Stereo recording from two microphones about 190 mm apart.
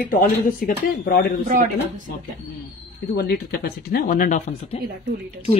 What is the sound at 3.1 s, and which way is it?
Speech, 55° left (ahead or behind).